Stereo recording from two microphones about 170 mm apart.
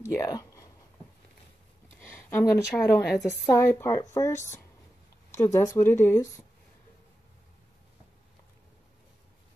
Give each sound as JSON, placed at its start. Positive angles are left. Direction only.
{"t": 0.1, "sound": "speech", "side_deg": 20}
{"t": 2.0, "sound": "a woman's voice", "side_deg": 15}